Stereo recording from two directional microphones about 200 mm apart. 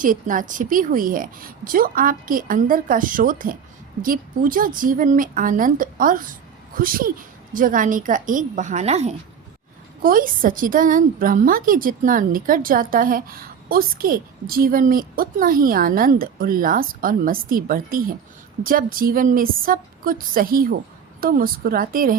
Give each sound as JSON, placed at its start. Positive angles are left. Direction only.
{"t": 0.0, "sound": "a woman's voice", "side_deg": -40}
{"t": 10.0, "sound": "a woman's voice", "side_deg": -45}